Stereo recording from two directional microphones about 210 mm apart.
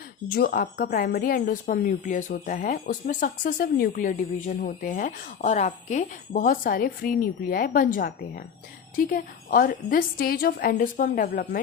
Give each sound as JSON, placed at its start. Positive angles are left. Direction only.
{"t": 0.3, "sound": "a woman's voice", "side_deg": 45}